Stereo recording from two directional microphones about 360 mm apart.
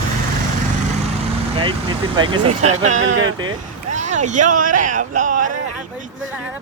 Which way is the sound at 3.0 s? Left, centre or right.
Right.